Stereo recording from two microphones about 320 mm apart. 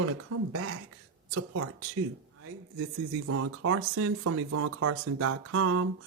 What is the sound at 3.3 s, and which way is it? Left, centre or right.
Speech, right.